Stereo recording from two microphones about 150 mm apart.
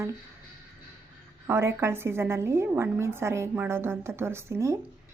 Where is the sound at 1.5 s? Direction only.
15° right (ahead or behind).